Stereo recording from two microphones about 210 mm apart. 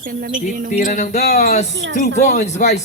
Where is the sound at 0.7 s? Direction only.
35° left (ahead or behind).